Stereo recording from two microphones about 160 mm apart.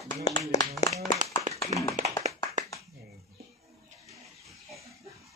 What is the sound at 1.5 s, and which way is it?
Tap, 50° right (ahead or behind).